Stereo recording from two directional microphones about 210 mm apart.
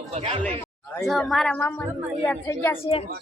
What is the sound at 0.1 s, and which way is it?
Speech, 30° right (ahead or behind).